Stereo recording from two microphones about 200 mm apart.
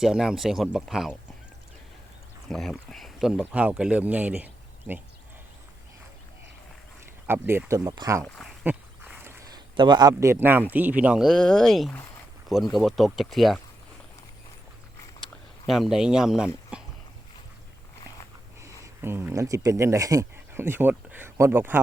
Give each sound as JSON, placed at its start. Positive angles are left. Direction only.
{"t": 0.0, "sound": "speech", "side_deg": 0}
{"t": 2.5, "sound": "speech", "side_deg": 0}
{"t": 7.3, "sound": "speech", "side_deg": -10}
{"t": 8.2, "sound": "speech", "side_deg": 5}
{"t": 8.6, "sound": "a sound", "side_deg": -10}
{"t": 9.7, "sound": "speech", "side_deg": -20}
{"t": 15.6, "sound": "speech", "side_deg": 0}
{"t": 16.7, "sound": "a sound", "side_deg": -5}
{"t": 18.6, "sound": "speech", "side_deg": -10}